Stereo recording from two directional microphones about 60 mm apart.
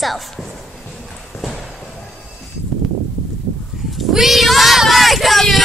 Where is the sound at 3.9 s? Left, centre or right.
Centre.